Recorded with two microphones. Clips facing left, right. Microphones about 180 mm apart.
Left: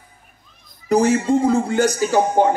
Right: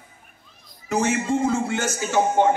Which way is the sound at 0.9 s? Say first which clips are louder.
Left 6 dB; 35° left (ahead or behind).